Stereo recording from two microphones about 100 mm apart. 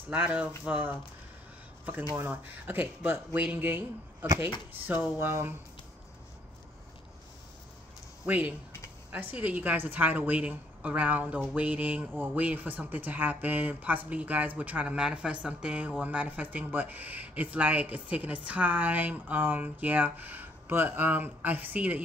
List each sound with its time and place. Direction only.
0.1 s speech: 15° right (ahead or behind)
2.2 s speech: 20° right (ahead or behind)
8.3 s speech: 15° right (ahead or behind)